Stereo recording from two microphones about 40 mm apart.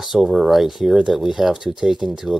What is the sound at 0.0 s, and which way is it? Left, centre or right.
Speech, centre.